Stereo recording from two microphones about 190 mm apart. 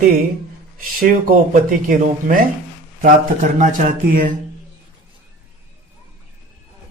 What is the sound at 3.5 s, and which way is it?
Speech, 45° right (ahead or behind).